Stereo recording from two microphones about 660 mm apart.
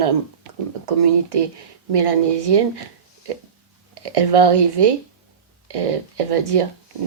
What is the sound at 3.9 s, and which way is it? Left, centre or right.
Speech, right.